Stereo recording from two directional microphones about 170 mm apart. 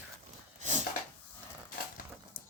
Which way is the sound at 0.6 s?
45° right (ahead or behind).